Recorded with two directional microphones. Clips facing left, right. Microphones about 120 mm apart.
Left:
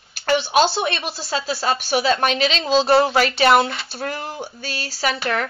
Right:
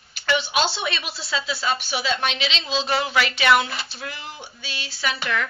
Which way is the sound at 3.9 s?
45° left (ahead or behind).